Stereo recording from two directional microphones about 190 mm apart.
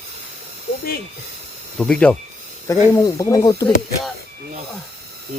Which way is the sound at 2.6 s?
15° left (ahead or behind).